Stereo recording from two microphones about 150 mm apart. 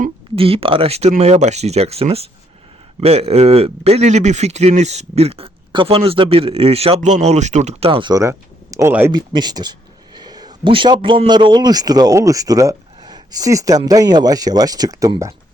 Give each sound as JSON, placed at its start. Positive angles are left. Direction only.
{"t": 0.3, "sound": "a man's voice", "side_deg": -40}
{"t": 8.1, "sound": "speech", "side_deg": -20}
{"t": 9.1, "sound": "a man's voice", "side_deg": -30}